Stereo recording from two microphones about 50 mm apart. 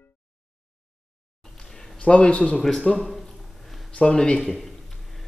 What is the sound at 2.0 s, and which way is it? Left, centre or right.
Speech, centre.